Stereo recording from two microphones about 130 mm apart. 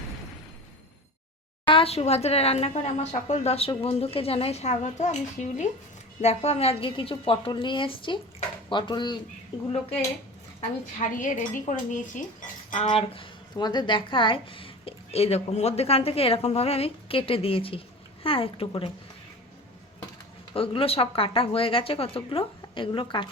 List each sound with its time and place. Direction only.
1.6 s speech: 45° left (ahead or behind); by 5.6 s 65° left (ahead or behind)
6.2 s speech: 55° left (ahead or behind); by 9.1 s 35° left (ahead or behind)
11.0 s speech: 80° left
12.9 s speech: 40° left (ahead or behind)
20.5 s speech: 45° left (ahead or behind)